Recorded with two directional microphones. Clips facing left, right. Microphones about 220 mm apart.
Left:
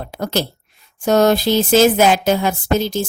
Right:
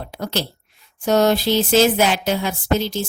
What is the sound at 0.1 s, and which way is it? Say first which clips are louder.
Speech: left 4 dB; 45° left (ahead or behind).